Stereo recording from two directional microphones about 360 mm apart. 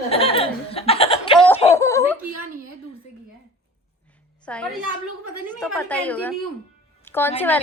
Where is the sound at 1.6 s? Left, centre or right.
Centre.